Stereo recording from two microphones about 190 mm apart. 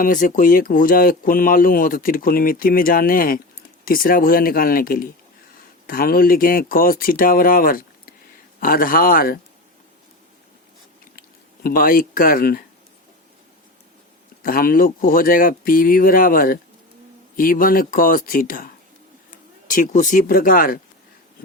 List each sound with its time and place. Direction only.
0.0 s speech: 45° left (ahead or behind)
11.2 s speech: 50° left (ahead or behind)
14.4 s speech: 50° left (ahead or behind)